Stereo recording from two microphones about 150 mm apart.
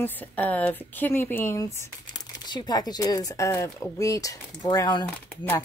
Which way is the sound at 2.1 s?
30° left (ahead or behind).